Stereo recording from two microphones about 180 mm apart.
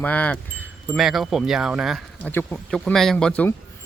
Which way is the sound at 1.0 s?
Centre (ahead or behind).